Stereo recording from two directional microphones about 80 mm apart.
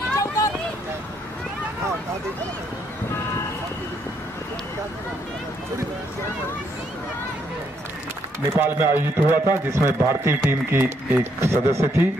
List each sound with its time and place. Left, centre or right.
8.5 s a man's voice: right